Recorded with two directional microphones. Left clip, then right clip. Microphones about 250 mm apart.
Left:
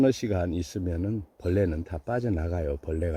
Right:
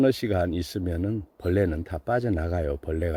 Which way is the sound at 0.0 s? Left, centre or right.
Centre.